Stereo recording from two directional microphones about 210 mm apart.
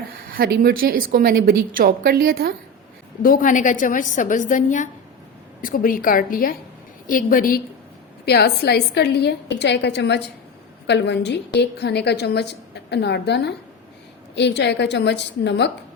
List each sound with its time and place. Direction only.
0.2 s a woman's voice: 45° right (ahead or behind)
3.2 s a woman's voice: 40° left (ahead or behind)